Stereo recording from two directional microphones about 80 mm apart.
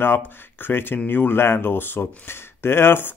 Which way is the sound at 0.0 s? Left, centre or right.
Left.